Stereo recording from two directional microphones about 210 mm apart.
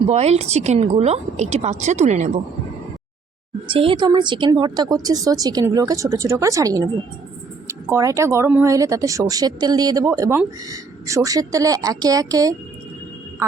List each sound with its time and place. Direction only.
0.1 s a woman's voice: 30° right (ahead or behind)
3.7 s speech: 25° right (ahead or behind)